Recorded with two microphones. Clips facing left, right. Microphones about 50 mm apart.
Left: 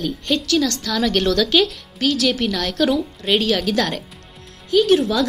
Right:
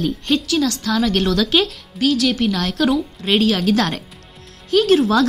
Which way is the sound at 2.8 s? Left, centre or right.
Centre.